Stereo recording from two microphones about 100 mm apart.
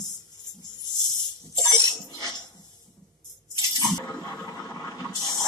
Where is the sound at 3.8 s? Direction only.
35° left (ahead or behind).